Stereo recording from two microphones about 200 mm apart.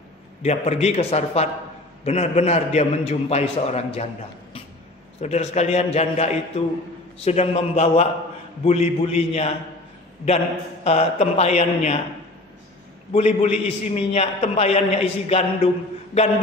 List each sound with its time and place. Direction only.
0.4 s a man's voice: 30° left (ahead or behind)
5.2 s a man's voice: 35° left (ahead or behind)
13.1 s a man's voice: 35° left (ahead or behind)